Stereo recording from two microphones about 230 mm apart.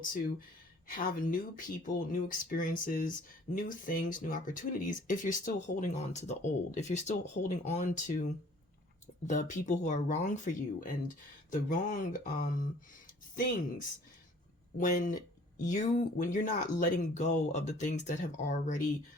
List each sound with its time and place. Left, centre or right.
0.0 s speech: left
14.8 s speech: left